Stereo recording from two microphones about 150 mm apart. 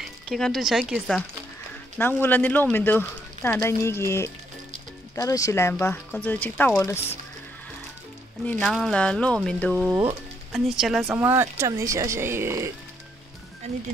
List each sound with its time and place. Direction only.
0.0 s speech: centre (ahead or behind)
2.0 s speech: 15° left (ahead or behind)
8.5 s speech: 5° left (ahead or behind)
10.8 s speech: centre (ahead or behind)
11.1 s speech: 15° right (ahead or behind)